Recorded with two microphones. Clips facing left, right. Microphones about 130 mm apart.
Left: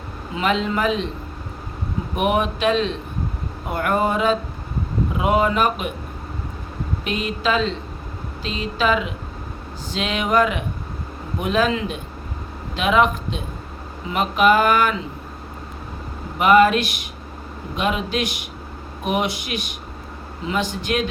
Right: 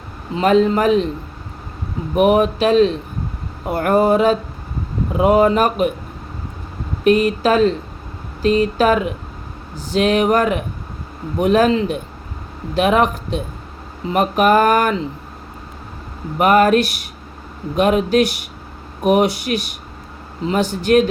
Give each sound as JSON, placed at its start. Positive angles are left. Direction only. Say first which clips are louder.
{"t": 0.3, "sound": "speech", "louder": "right 7 dB", "side_deg": -45}
{"t": 2.1, "sound": "speech", "louder": "right 7 dB", "side_deg": -35}
{"t": 7.0, "sound": "speech", "louder": "right 11 dB", "side_deg": -45}
{"t": 16.4, "sound": "speech", "louder": "right 2 dB", "side_deg": -45}